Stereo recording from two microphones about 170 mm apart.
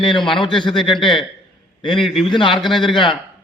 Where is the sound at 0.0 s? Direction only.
30° left (ahead or behind).